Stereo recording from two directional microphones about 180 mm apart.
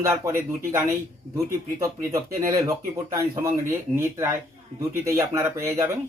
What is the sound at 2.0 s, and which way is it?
Speech, 20° right (ahead or behind).